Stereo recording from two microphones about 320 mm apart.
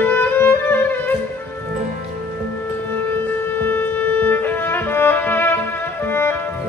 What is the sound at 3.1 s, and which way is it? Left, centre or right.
Music, centre.